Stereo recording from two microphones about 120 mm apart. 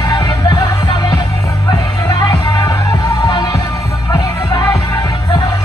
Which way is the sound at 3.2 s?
35° left (ahead or behind).